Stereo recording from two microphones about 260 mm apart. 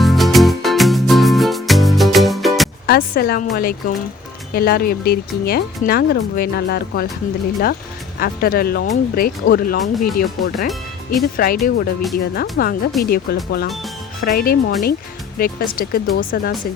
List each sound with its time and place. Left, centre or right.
0.0 s music: centre
2.8 s speech: left
8.2 s speech: left